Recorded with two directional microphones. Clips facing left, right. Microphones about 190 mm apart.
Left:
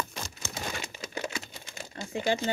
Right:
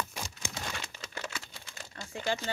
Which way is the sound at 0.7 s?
10° left (ahead or behind).